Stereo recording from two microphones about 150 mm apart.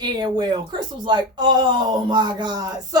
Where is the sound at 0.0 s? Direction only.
25° right (ahead or behind).